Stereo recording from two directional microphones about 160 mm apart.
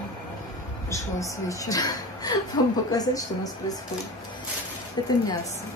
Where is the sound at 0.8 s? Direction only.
20° left (ahead or behind).